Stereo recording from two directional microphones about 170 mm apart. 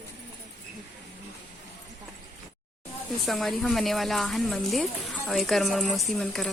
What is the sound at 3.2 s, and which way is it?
Speech, centre (ahead or behind).